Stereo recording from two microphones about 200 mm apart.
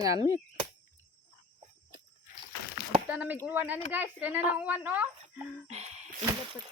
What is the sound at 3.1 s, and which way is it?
Speech, 5° right (ahead or behind).